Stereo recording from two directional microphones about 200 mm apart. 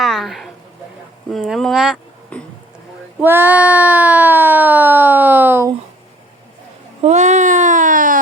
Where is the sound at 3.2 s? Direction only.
10° right (ahead or behind).